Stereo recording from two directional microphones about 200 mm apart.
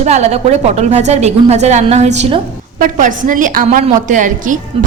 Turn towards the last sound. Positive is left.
turn(degrees=-40)  # may be behind; listen again after turning